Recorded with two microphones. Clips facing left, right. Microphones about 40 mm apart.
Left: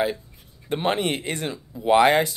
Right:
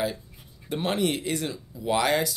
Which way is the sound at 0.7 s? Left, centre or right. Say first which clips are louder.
Left 3 dB; left.